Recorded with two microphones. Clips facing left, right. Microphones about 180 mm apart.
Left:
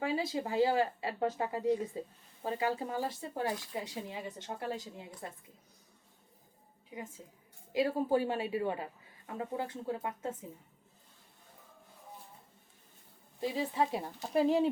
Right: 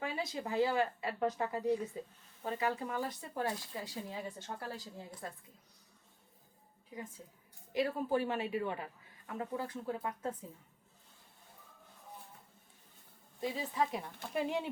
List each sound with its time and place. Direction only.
0.0 s a woman's voice: 30° left (ahead or behind)
7.7 s a woman's voice: 25° left (ahead or behind)
13.4 s a woman's voice: 30° left (ahead or behind)